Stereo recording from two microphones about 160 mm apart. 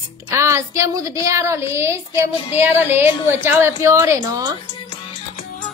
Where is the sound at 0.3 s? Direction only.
15° right (ahead or behind).